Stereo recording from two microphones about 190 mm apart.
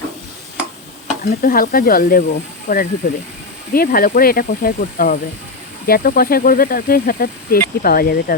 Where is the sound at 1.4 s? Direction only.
50° left (ahead or behind).